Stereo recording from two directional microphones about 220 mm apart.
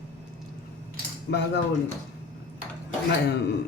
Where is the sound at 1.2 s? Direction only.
50° left (ahead or behind).